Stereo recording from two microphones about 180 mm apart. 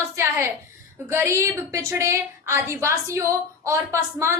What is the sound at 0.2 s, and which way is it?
A woman's voice, 15° right (ahead or behind).